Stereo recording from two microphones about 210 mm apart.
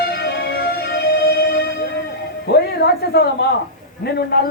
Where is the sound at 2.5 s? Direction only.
50° left (ahead or behind).